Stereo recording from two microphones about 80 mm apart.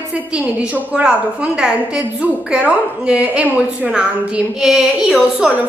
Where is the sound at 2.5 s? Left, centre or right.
Centre.